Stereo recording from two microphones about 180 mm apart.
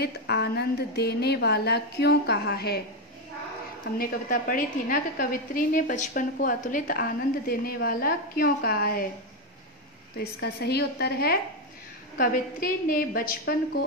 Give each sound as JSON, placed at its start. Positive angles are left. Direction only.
{"t": 0.0, "sound": "a woman's voice", "side_deg": 65}
{"t": 4.0, "sound": "a woman's voice", "side_deg": 50}
{"t": 10.1, "sound": "a woman's voice", "side_deg": 60}